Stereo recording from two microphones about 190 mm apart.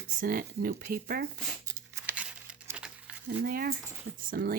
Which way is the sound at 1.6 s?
10° right (ahead or behind).